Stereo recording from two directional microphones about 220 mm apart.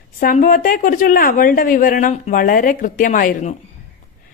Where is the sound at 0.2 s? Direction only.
35° left (ahead or behind).